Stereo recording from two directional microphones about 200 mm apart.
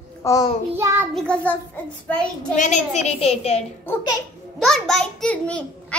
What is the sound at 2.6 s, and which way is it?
A child's voice, 35° left (ahead or behind).